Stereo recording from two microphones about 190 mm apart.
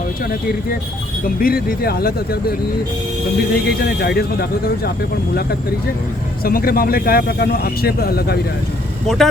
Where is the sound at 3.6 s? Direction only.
55° left (ahead or behind).